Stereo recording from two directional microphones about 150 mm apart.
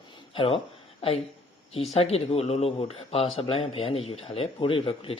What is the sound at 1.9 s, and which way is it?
Speech, 40° left (ahead or behind).